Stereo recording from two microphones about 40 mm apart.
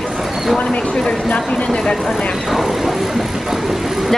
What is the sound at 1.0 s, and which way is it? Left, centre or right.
Speech, centre.